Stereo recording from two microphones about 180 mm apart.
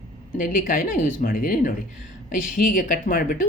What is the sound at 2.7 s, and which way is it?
Speech, 45° left (ahead or behind).